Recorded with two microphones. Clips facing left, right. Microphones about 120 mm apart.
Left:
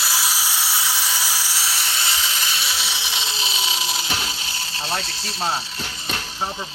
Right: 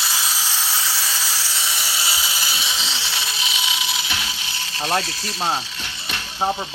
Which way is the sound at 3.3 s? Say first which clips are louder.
Even; 35° left (ahead or behind).